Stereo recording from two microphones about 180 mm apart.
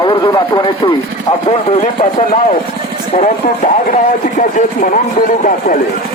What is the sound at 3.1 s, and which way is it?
Speech, 45° left (ahead or behind).